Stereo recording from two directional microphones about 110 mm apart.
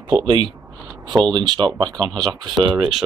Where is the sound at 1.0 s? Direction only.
45° right (ahead or behind).